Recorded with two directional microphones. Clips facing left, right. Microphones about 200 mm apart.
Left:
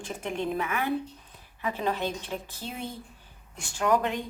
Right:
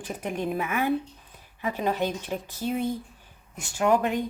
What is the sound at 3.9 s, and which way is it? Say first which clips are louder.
Speech: right 2 dB; 10° right (ahead or behind).